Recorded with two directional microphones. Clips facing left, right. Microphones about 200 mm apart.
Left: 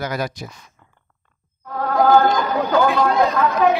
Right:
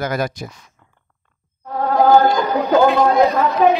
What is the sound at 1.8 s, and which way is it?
Speech, 20° right (ahead or behind).